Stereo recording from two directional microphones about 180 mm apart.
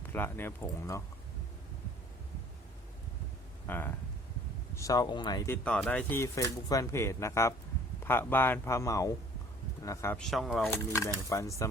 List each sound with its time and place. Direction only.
0.0 s speech: 10° left (ahead or behind)
3.7 s speech: 10° left (ahead or behind)
5.6 s speech: 5° left (ahead or behind)
10.2 s speech: centre (ahead or behind)
10.6 s speech: 15° left (ahead or behind)